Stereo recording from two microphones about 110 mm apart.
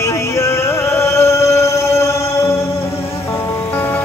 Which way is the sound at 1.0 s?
25° left (ahead or behind).